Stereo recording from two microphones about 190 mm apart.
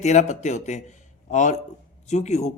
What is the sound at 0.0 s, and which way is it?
A man's voice, 35° left (ahead or behind).